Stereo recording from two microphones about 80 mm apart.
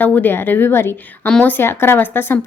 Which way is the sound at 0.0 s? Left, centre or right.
Left.